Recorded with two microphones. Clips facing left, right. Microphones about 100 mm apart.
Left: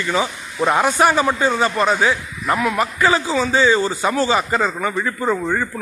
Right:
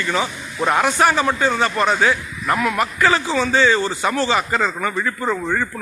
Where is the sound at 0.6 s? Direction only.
5° left (ahead or behind).